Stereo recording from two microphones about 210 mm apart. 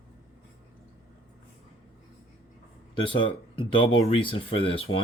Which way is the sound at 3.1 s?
25° left (ahead or behind).